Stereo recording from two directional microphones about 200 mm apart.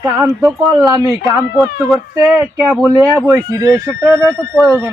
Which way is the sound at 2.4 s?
Centre (ahead or behind).